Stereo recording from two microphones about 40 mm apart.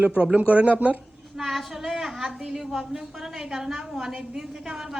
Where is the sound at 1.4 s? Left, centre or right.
Centre.